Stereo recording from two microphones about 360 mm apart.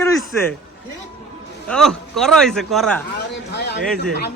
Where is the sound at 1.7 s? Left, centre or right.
Centre.